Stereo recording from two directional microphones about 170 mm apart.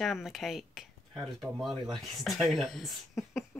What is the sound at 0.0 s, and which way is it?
Speech, centre (ahead or behind).